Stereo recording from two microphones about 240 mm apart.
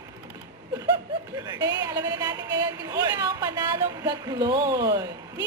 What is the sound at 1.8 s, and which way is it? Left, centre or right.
A woman's voice, centre.